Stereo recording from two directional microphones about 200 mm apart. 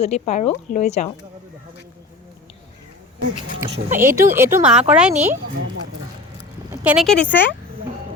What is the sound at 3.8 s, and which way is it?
Speech, 40° right (ahead or behind).